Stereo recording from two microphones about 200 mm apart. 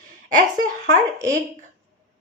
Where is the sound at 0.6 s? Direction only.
40° right (ahead or behind).